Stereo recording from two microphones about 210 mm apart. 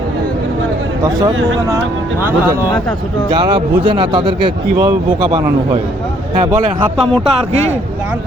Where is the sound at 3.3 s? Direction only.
20° right (ahead or behind).